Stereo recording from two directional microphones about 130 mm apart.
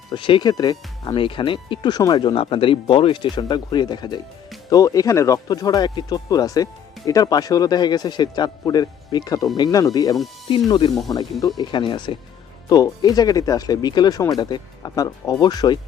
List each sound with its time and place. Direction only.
0.1 s speech: 40° left (ahead or behind)
10.5 s speech: 40° left (ahead or behind)